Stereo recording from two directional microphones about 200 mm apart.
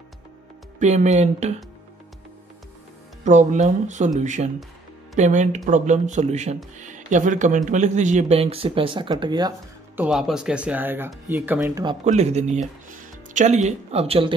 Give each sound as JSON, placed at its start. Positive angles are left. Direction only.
{"t": 0.7, "sound": "speech", "side_deg": -35}
{"t": 3.3, "sound": "speech", "side_deg": -35}
{"t": 9.9, "sound": "speech", "side_deg": -5}
{"t": 12.0, "sound": "speech", "side_deg": -35}